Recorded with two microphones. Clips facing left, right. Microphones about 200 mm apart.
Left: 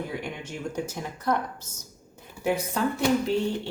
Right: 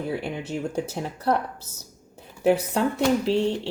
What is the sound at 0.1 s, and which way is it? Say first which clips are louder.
Speech: right 6 dB; 35° right (ahead or behind).